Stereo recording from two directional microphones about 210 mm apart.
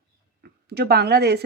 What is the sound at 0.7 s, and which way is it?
Speech, 50° right (ahead or behind).